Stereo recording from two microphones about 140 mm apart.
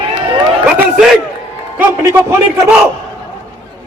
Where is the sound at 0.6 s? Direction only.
5° right (ahead or behind).